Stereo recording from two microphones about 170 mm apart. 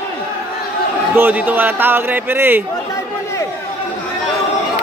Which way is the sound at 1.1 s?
10° right (ahead or behind).